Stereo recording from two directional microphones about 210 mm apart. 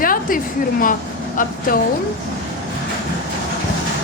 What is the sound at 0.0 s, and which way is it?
A woman's voice, 40° left (ahead or behind).